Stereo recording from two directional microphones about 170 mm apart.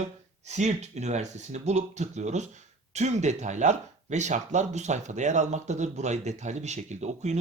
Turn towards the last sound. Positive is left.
turn(degrees=-40)  # may be behind; listen again after turning